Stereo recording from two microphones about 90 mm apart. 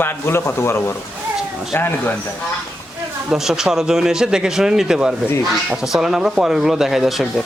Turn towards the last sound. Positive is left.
turn(degrees=-5)  # may be behind; listen again after turning